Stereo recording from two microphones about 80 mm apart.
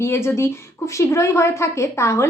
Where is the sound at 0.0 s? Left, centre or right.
Left.